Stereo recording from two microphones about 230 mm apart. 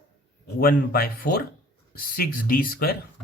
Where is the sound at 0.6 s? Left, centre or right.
Left.